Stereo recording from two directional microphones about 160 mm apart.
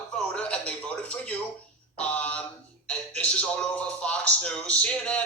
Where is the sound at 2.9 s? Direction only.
5° left (ahead or behind).